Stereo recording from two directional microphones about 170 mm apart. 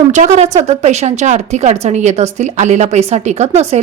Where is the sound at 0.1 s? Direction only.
45° right (ahead or behind).